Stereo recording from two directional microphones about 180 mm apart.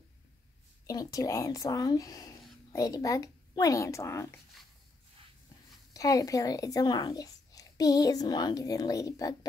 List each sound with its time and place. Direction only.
0.8 s speech: 20° left (ahead or behind)
5.9 s speech: 20° left (ahead or behind)